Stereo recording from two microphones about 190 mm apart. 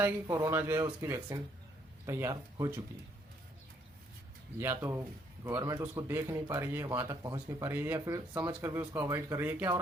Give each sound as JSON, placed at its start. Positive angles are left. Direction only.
{"t": 0.0, "sound": "speech", "side_deg": -15}
{"t": 4.6, "sound": "speech", "side_deg": -15}